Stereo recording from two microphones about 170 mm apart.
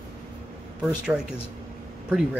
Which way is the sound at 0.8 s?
5° right (ahead or behind).